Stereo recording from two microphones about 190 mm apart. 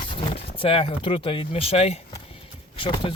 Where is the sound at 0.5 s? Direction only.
30° left (ahead or behind).